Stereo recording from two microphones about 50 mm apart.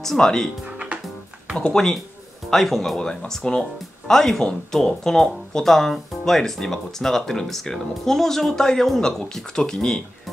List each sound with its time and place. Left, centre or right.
0.0 s speech: centre
1.7 s speech: centre
3.0 s speech: centre